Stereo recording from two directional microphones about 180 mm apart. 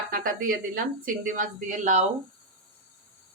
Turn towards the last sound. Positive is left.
turn(degrees=-40)  # may be behind; listen again after turning